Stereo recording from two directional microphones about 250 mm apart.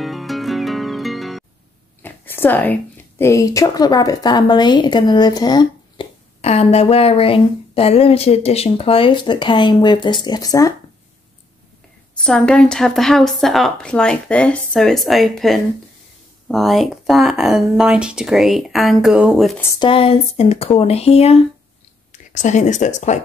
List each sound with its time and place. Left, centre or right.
0.0 s music: centre
2.0 s a woman's voice: centre
12.2 s a woman's voice: centre
19.8 s speech: left